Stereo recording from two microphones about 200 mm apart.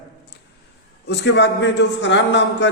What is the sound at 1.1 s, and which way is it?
A man's voice, 60° left (ahead or behind).